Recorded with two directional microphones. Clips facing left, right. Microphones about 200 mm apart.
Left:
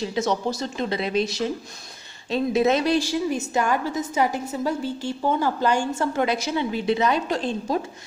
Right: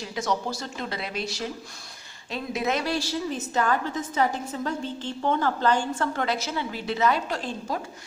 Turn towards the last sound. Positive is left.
turn(degrees=20)  # may be behind; listen again after turning